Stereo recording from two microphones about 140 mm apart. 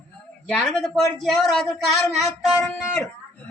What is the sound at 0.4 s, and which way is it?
A man's voice, 5° left (ahead or behind).